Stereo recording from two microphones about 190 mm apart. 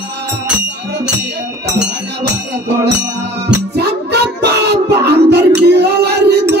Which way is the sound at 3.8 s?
60° right (ahead or behind).